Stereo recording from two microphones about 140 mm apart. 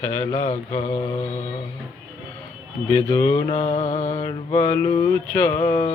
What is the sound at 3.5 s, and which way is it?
Mantra, 50° left (ahead or behind).